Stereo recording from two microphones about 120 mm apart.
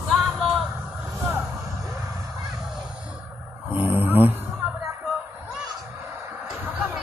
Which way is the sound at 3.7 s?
15° right (ahead or behind).